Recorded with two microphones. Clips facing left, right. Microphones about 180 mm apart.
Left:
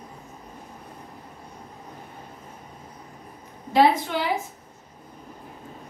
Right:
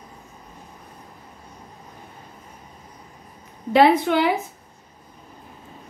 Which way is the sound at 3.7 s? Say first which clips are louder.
Right 4 dB; 65° right (ahead or behind).